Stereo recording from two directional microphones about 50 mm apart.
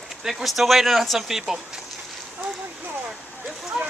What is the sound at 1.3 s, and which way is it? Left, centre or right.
Speech, centre.